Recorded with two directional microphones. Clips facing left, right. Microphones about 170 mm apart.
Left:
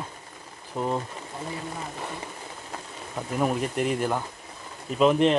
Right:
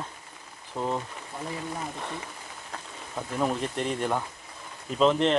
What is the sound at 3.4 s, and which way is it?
Speech, 10° left (ahead or behind).